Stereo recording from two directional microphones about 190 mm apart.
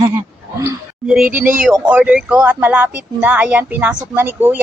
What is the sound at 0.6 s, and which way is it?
Speech, 5° right (ahead or behind).